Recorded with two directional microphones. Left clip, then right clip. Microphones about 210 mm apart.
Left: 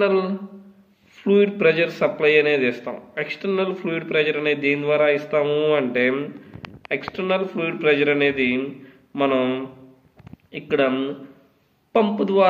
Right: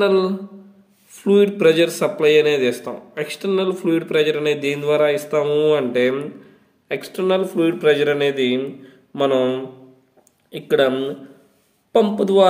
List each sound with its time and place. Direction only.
0.0 s speech: 50° right (ahead or behind)